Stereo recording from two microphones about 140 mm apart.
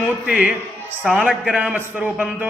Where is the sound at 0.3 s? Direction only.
10° right (ahead or behind).